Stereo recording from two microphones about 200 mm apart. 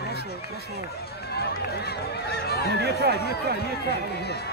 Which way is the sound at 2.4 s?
55° left (ahead or behind).